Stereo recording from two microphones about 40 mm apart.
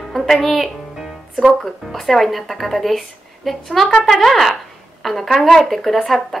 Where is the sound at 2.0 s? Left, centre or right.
Centre.